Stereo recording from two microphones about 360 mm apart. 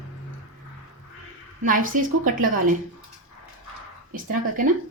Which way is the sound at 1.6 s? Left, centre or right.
Right.